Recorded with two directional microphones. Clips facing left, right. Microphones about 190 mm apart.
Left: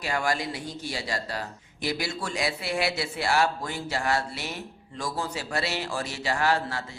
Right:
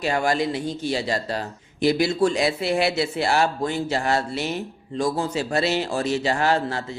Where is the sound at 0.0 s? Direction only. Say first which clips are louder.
Right 6 dB; 25° right (ahead or behind).